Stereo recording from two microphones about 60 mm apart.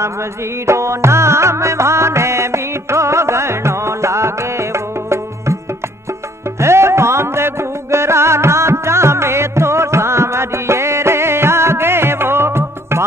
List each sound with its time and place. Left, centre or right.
0.0 s music: right
6.6 s music: right